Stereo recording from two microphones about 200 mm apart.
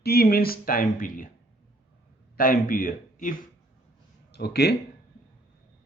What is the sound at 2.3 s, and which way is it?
Speech, 45° left (ahead or behind).